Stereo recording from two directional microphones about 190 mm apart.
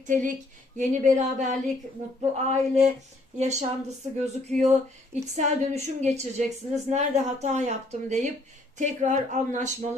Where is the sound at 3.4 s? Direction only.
35° right (ahead or behind).